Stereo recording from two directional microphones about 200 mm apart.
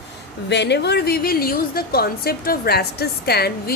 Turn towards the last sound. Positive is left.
turn(degrees=50)  # may be behind; listen again after turning